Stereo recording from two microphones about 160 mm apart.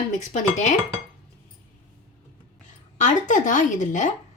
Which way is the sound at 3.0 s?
50° left (ahead or behind).